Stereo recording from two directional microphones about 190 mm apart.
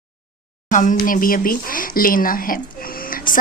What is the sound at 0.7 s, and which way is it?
Speech, 40° left (ahead or behind).